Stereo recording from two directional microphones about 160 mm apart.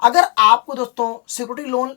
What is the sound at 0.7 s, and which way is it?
Speech, 20° left (ahead or behind).